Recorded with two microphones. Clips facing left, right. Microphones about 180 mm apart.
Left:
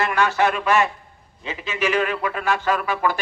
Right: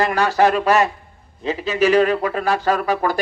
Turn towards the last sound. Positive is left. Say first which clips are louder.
# right 3 dB
turn(degrees=-40)  # may be behind; listen again after turning